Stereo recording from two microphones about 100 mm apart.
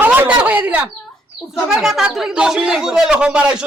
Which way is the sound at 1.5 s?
Centre (ahead or behind).